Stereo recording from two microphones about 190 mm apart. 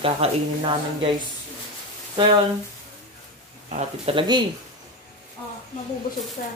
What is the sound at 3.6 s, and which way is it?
Speech, 35° right (ahead or behind).